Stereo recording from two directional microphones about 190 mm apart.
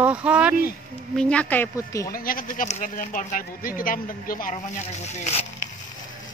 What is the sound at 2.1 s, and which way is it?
Speech, 50° left (ahead or behind).